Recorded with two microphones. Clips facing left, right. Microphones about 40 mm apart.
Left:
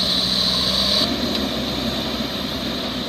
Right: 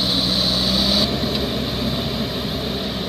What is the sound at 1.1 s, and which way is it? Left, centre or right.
Vehicle, centre.